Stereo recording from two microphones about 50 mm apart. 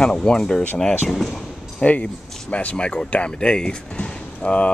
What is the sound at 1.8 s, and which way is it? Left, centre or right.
Speech, left.